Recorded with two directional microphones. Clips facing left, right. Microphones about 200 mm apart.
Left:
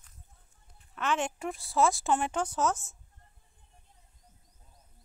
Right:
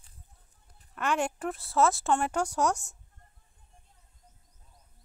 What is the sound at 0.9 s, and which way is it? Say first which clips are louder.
Speech: right 2 dB; 10° right (ahead or behind).